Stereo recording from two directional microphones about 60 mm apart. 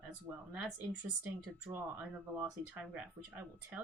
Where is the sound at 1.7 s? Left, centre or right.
Right.